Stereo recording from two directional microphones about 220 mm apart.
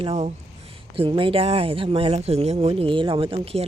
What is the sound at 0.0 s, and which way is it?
Speech, 30° right (ahead or behind).